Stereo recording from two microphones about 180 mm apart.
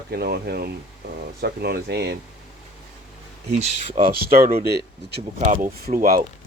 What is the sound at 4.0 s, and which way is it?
Speech, 55° right (ahead or behind).